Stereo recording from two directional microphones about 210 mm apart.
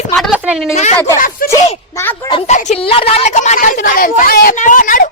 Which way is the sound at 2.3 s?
30° left (ahead or behind).